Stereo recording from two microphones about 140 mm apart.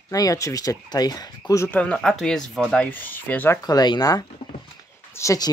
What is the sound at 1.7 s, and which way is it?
Speech, 10° left (ahead or behind).